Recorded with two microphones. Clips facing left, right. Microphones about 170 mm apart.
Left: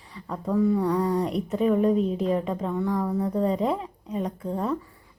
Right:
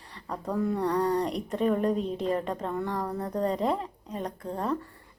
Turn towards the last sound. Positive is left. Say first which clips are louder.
# left 3 dB
turn(degrees=5)  # may be behind; listen again after turning